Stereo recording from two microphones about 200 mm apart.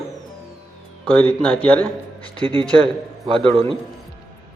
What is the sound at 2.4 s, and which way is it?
Speech, 25° right (ahead or behind).